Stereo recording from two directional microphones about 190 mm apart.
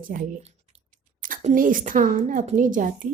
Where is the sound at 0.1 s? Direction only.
45° right (ahead or behind).